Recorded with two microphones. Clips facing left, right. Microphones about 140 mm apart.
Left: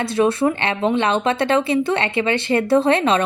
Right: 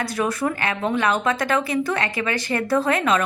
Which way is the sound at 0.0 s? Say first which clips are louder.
Left 6 dB; 25° left (ahead or behind).